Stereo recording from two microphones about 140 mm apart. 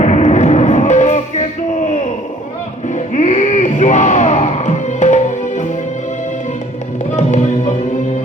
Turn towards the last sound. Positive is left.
turn(degrees=55)  # may be behind; listen again after turning